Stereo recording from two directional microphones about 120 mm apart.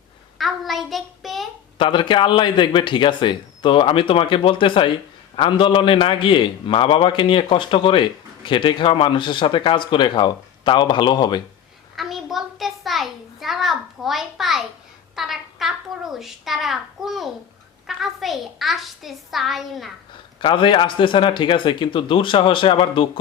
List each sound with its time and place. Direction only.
0.3 s a child's voice: centre (ahead or behind)
1.8 s speech: 40° left (ahead or behind)
11.9 s a sound: centre (ahead or behind)
17.8 s a child's voice: centre (ahead or behind)
20.4 s speech: 45° left (ahead or behind)